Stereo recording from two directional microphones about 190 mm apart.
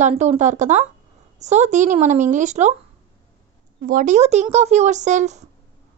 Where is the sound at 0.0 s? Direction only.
35° right (ahead or behind).